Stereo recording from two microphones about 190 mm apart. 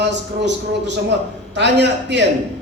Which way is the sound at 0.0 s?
65° right (ahead or behind).